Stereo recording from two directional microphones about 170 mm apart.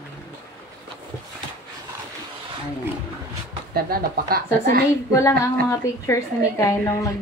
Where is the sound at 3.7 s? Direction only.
60° right (ahead or behind).